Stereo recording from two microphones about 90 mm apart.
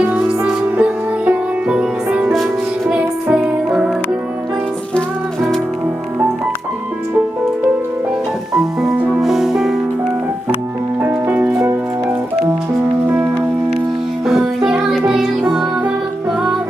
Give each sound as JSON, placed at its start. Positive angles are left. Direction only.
{"t": 0.0, "sound": "music", "side_deg": -15}
{"t": 2.3, "sound": "music", "side_deg": 5}
{"t": 2.9, "sound": "music", "side_deg": -10}
{"t": 4.9, "sound": "music", "side_deg": 5}
{"t": 9.0, "sound": "music", "side_deg": -5}
{"t": 11.0, "sound": "music", "side_deg": -20}
{"t": 14.3, "sound": "music", "side_deg": -5}